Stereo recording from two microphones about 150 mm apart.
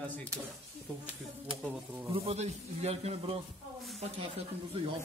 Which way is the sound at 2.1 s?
40° right (ahead or behind).